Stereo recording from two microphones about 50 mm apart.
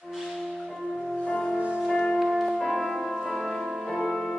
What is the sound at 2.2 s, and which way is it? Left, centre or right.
Music, centre.